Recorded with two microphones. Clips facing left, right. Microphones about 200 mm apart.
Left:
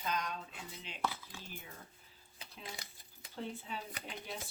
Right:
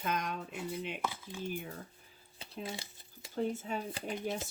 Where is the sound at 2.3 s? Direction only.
25° right (ahead or behind).